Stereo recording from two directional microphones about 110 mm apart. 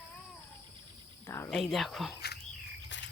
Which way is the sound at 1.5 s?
Centre (ahead or behind).